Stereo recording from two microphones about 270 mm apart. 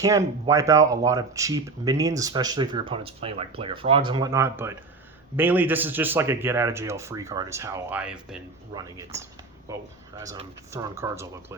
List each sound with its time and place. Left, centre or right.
0.0 s speech: centre